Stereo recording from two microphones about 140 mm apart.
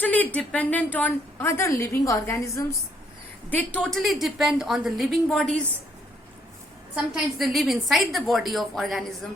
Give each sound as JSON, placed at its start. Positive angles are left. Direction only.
{"t": 0.0, "sound": "a sound", "side_deg": 10}
{"t": 0.3, "sound": "a woman's voice", "side_deg": 10}
{"t": 3.5, "sound": "a woman's voice", "side_deg": 10}
{"t": 6.9, "sound": "a woman's voice", "side_deg": 0}